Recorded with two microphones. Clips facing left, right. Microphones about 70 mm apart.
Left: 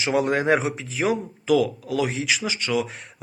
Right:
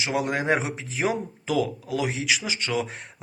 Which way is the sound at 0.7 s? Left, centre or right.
Right.